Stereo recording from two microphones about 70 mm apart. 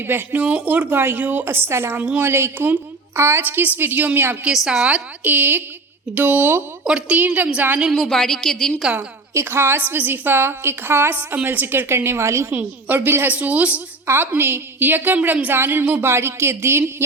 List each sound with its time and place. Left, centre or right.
0.0 s a woman's voice: right
3.4 s speech: right
4.5 s a woman's voice: centre
4.9 s speech: right
6.8 s a woman's voice: centre
7.2 s speech: right
8.0 s speech: centre
9.3 s a woman's voice: right
12.5 s speech: right
14.1 s a woman's voice: right